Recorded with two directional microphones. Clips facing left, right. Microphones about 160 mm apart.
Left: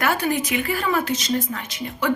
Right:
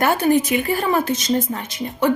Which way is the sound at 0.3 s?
45° right (ahead or behind).